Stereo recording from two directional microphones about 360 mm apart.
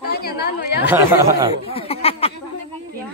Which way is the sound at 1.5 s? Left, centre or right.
Centre.